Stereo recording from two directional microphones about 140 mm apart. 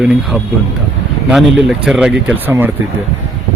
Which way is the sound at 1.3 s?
Centre (ahead or behind).